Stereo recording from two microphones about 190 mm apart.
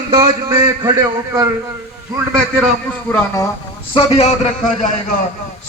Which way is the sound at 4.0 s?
30° left (ahead or behind).